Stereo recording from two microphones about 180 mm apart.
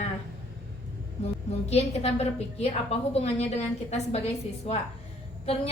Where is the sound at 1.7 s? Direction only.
35° left (ahead or behind).